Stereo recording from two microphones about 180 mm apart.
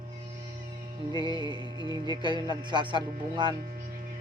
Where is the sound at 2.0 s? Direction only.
25° right (ahead or behind).